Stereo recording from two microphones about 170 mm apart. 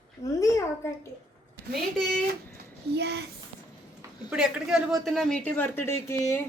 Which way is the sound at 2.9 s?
75° right (ahead or behind).